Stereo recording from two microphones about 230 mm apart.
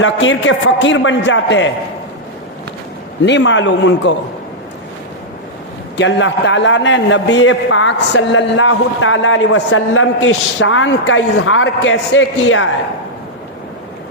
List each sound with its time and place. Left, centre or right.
0.0 s a man's voice: left
3.2 s a man's voice: left
6.0 s a man's voice: left